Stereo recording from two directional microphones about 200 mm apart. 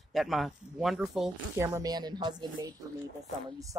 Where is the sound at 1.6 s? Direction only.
15° right (ahead or behind).